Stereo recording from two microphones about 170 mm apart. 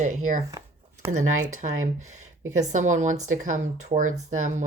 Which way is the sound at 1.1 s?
45° right (ahead or behind).